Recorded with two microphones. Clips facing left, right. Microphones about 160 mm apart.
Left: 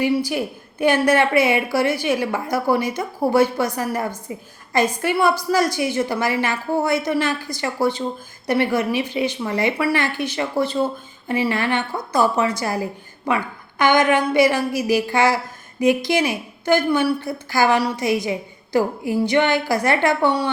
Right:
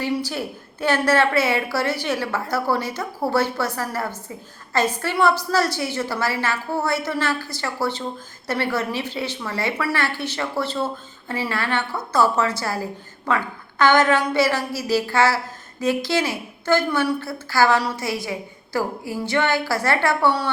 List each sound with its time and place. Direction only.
0.0 s a woman's voice: 15° left (ahead or behind)